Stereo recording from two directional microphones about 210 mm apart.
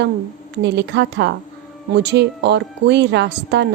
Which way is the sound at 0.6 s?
55° right (ahead or behind).